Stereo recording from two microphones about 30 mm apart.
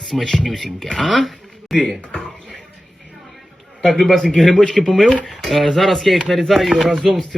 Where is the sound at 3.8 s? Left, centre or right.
Centre.